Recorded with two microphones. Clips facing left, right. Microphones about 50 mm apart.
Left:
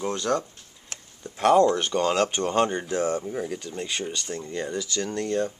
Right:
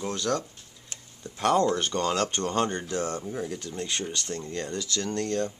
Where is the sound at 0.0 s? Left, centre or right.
Centre.